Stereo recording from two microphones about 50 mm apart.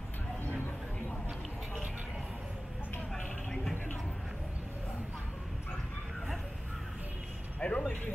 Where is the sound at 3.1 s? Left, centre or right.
Centre.